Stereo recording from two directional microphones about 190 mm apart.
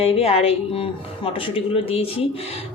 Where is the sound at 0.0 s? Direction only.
30° left (ahead or behind).